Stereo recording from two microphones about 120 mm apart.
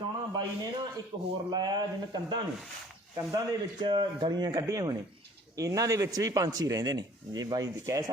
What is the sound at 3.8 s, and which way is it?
A man's voice, 40° right (ahead or behind).